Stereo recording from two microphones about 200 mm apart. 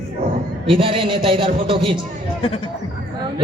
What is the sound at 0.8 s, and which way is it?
A man's voice, 25° right (ahead or behind).